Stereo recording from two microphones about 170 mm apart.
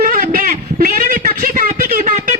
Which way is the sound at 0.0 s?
50° right (ahead or behind).